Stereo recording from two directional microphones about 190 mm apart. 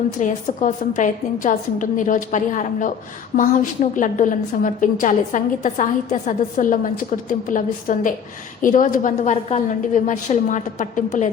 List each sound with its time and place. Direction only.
0.2 s a woman's voice: 40° left (ahead or behind)